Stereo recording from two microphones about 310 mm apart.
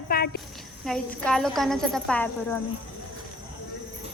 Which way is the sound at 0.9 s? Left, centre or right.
Centre.